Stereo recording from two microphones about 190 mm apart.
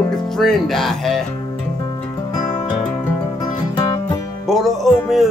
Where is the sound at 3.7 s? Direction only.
20° left (ahead or behind).